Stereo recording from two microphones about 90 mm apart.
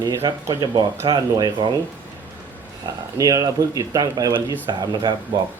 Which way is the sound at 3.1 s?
45° right (ahead or behind).